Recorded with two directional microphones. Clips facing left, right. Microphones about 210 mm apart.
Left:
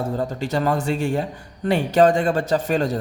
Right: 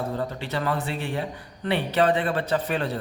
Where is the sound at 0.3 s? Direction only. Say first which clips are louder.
Left 6 dB; 45° left (ahead or behind).